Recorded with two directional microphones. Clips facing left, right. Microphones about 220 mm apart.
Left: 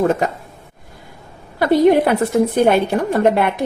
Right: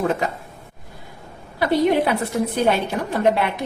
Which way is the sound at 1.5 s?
45° left (ahead or behind).